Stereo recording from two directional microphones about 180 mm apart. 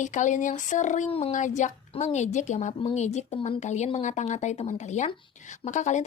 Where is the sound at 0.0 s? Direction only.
45° left (ahead or behind).